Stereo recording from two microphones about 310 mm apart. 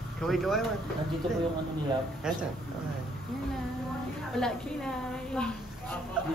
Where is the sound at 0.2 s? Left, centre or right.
Centre.